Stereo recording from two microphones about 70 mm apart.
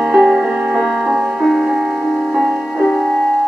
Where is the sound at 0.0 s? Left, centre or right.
Centre.